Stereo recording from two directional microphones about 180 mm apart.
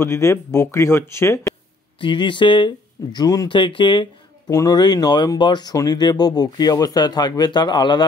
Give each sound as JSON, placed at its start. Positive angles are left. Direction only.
{"t": 0.0, "sound": "speech", "side_deg": 15}
{"t": 2.0, "sound": "speech", "side_deg": 25}